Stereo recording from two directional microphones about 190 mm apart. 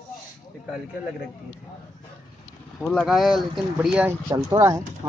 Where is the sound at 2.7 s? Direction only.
Centre (ahead or behind).